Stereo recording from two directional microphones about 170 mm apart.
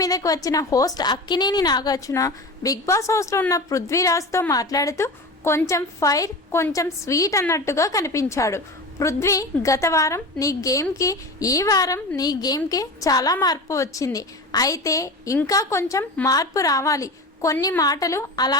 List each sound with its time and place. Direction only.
0.0 s a woman's voice: 20° left (ahead or behind)